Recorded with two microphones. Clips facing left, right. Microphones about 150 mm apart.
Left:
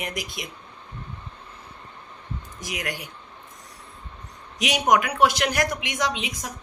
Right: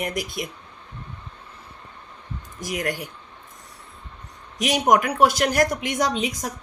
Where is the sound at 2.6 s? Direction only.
50° right (ahead or behind).